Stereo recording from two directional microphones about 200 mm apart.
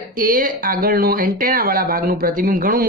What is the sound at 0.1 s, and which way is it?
Speech, 45° right (ahead or behind).